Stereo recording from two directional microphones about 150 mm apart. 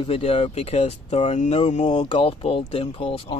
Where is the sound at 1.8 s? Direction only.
35° left (ahead or behind).